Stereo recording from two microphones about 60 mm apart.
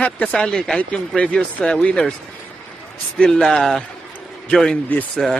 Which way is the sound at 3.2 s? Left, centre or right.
Centre.